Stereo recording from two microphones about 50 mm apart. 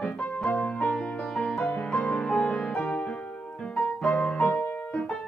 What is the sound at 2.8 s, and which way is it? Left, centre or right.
Music, left.